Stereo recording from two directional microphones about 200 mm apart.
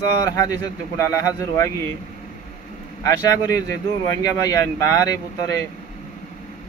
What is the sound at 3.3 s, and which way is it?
Speech, 15° left (ahead or behind).